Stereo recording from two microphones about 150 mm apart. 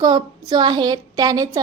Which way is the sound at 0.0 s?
25° right (ahead or behind).